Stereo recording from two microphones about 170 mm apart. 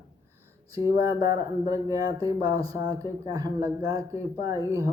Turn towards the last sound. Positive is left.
turn(degrees=-20)  # may be behind; listen again after turning